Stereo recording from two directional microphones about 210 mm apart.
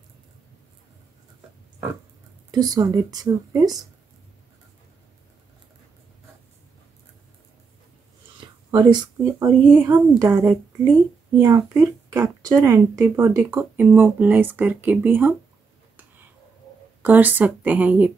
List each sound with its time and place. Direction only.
2.5 s speech: 20° right (ahead or behind)
8.4 s speech: 20° right (ahead or behind)
17.0 s speech: 10° right (ahead or behind)